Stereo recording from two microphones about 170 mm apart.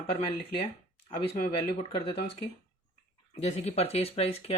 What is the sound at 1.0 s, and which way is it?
Speech, 30° left (ahead or behind).